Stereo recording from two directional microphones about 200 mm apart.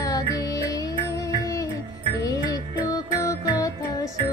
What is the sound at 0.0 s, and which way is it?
Music, 20° left (ahead or behind).